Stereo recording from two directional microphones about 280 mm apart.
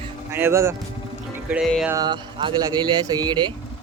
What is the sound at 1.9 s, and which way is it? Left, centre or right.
Speech, centre.